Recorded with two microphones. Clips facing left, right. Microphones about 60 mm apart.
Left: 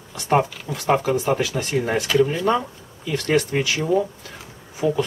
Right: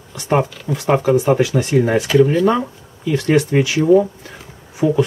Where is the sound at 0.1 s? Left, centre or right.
Centre.